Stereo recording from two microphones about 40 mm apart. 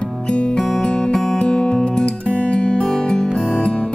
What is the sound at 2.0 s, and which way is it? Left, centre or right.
Music, left.